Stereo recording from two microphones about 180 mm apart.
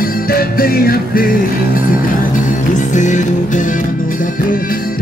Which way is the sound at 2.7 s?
45° left (ahead or behind).